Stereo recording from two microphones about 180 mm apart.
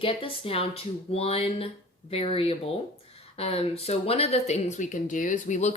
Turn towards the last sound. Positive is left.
turn(degrees=40)  # may be behind; listen again after turning